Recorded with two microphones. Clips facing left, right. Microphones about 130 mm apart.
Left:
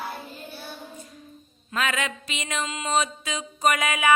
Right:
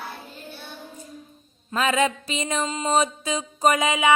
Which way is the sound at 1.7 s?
30° right (ahead or behind).